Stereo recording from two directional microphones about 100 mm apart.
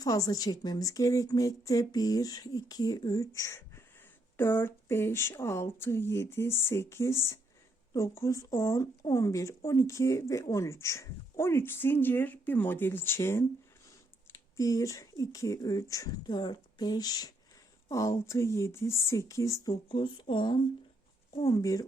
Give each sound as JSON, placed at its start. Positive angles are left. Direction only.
{"t": 0.0, "sound": "a woman's voice", "side_deg": 40}
{"t": 19.7, "sound": "speech", "side_deg": 60}
{"t": 21.4, "sound": "a woman's voice", "side_deg": 35}